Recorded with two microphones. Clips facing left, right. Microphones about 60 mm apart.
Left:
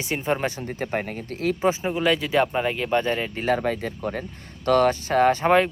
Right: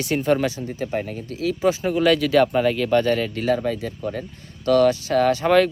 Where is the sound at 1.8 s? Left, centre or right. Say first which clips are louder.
Right 4 dB; centre.